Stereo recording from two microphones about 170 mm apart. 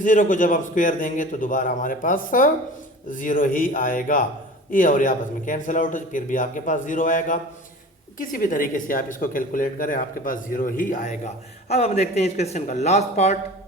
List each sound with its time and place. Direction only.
0.0 s speech: 50° left (ahead or behind)
11.7 s a man's voice: 40° left (ahead or behind)